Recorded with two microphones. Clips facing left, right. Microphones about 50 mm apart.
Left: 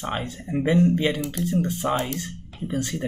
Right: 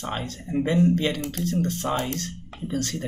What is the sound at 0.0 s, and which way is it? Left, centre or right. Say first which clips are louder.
Speech: left 2 dB; centre.